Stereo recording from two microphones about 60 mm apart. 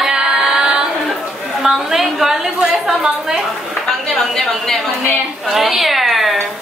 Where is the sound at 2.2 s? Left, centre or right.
Centre.